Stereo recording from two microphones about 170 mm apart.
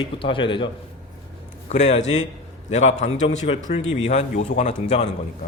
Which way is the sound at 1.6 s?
40° left (ahead or behind).